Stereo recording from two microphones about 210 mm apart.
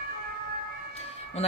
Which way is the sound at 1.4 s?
30° left (ahead or behind).